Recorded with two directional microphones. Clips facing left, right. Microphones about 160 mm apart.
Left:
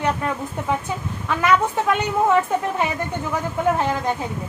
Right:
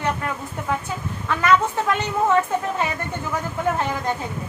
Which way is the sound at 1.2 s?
15° left (ahead or behind).